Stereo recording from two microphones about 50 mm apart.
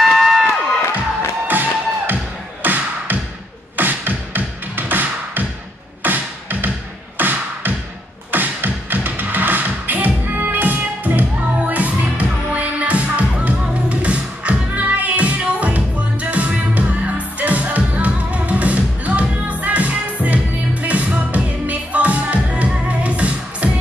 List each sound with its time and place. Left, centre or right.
0.0 s crowd: centre
1.5 s music: right